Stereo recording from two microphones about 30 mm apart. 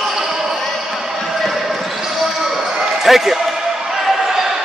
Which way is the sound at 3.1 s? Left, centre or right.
Centre.